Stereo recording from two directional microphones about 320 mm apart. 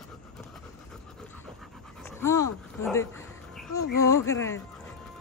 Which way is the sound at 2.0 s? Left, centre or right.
Centre.